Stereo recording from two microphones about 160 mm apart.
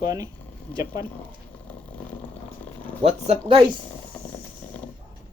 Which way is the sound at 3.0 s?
40° right (ahead or behind).